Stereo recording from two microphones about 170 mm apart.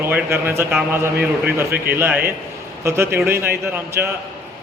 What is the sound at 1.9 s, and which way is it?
A man's voice, 10° right (ahead or behind).